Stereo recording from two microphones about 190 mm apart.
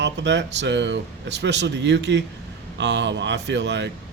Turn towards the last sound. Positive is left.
turn(degrees=-65)  # may be behind; listen again after turning